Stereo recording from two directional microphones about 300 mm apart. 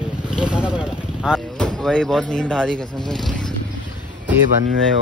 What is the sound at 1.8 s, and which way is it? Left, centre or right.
Speech, centre.